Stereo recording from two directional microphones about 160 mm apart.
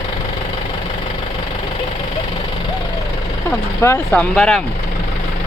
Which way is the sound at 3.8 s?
15° left (ahead or behind).